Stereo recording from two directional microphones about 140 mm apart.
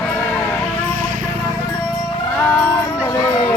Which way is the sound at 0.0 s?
15° left (ahead or behind).